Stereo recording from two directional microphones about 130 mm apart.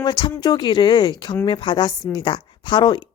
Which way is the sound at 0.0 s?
35° left (ahead or behind).